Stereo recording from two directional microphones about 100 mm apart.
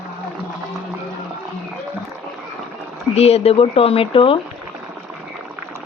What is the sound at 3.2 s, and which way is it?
Speech, 90° left.